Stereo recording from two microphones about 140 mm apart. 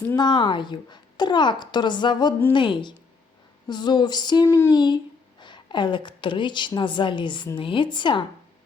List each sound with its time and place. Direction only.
0.2 s a child's voice: 30° left (ahead or behind)
4.4 s speech: 20° left (ahead or behind)
5.4 s a woman's voice: 35° left (ahead or behind)